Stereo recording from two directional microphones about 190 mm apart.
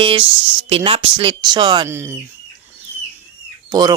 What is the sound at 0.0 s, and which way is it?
Speech, 25° right (ahead or behind).